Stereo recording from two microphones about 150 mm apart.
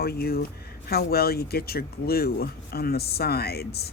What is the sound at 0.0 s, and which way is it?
Speech, 90° left.